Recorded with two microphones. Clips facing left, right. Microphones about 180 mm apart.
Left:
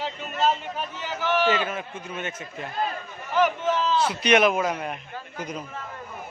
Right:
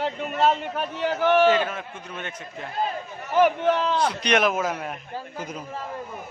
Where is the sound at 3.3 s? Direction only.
55° right (ahead or behind).